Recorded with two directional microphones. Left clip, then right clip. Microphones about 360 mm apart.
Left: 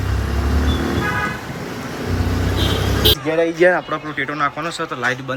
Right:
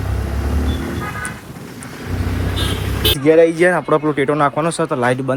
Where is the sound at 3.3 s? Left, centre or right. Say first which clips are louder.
Right 4 dB; centre.